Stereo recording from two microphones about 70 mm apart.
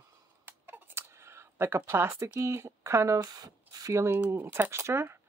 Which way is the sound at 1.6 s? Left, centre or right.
Right.